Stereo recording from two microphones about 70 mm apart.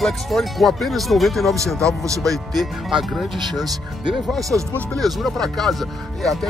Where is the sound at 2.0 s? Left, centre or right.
Right.